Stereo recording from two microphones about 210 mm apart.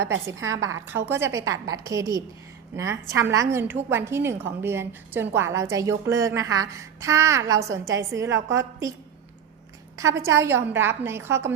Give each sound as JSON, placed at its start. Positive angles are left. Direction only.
{"t": 0.3, "sound": "a woman's voice", "side_deg": -15}
{"t": 10.0, "sound": "a woman's voice", "side_deg": -15}